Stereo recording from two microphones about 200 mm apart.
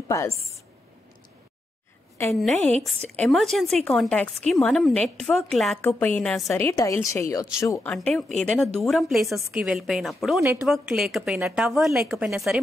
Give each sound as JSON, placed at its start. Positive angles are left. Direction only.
{"t": 0.1, "sound": "a woman's voice", "side_deg": 15}
{"t": 2.3, "sound": "a woman's voice", "side_deg": 0}
{"t": 6.5, "sound": "a woman's voice", "side_deg": 15}
{"t": 10.4, "sound": "a woman's voice", "side_deg": -10}